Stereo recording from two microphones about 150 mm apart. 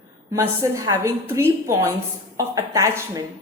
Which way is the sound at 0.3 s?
20° right (ahead or behind).